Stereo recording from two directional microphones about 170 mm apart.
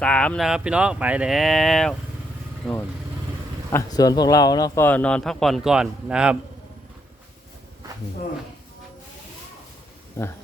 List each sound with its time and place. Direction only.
0.0 s speech: 5° left (ahead or behind)
3.7 s speech: 20° left (ahead or behind); by 6.3 s 5° right (ahead or behind)
10.2 s speech: 15° left (ahead or behind)